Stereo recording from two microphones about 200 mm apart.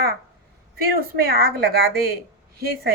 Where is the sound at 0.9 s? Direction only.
50° right (ahead or behind).